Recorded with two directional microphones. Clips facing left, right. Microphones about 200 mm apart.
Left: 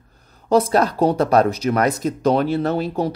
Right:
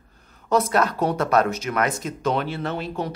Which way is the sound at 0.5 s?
30° left (ahead or behind).